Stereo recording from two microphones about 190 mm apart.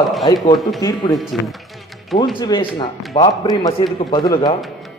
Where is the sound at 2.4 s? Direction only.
25° left (ahead or behind).